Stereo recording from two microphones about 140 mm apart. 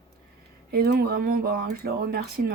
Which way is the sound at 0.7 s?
90° right.